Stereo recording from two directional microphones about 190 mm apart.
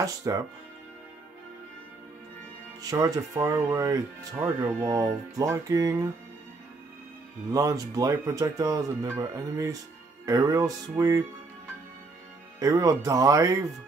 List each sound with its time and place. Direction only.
0.0 s speech: 20° right (ahead or behind)
2.8 s speech: 20° right (ahead or behind)
7.5 s speech: 20° right (ahead or behind)
12.5 s speech: 20° right (ahead or behind)